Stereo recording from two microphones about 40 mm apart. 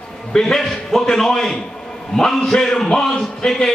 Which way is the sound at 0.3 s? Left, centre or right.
Centre.